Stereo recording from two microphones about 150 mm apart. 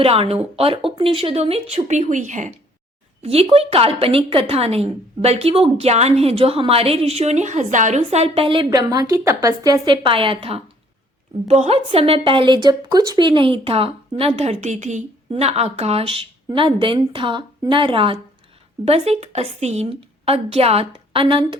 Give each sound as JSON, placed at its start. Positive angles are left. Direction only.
{"t": 0.0, "sound": "a woman's voice", "side_deg": -40}
{"t": 3.2, "sound": "a woman's voice", "side_deg": -40}